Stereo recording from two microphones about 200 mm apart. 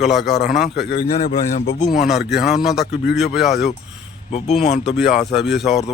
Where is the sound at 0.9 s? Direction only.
50° left (ahead or behind).